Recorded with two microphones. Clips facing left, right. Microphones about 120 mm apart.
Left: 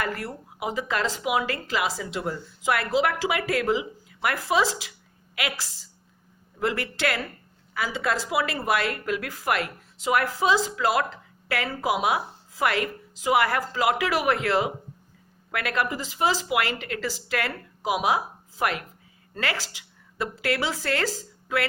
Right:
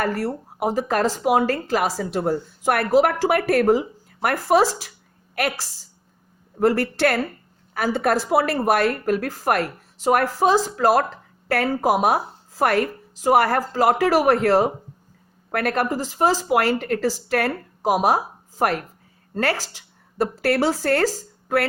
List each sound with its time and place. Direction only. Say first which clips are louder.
0.0 s speech: right 7 dB; 40° right (ahead or behind)
20.1 s speech: right 7 dB; 45° right (ahead or behind)